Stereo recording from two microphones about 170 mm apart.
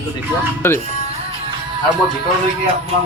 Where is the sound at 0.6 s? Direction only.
15° left (ahead or behind).